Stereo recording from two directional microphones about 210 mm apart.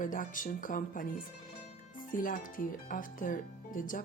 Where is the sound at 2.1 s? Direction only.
40° left (ahead or behind).